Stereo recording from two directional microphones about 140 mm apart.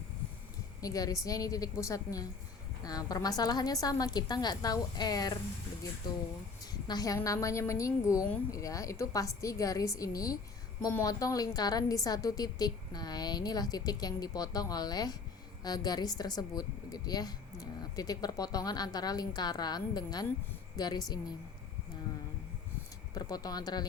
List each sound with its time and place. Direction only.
0.8 s a woman's voice: 25° left (ahead or behind)
6.8 s a woman's voice: 25° left (ahead or behind)
23.1 s a woman's voice: 30° left (ahead or behind)